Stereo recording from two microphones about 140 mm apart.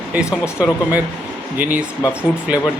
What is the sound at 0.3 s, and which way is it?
Speech, 20° left (ahead or behind).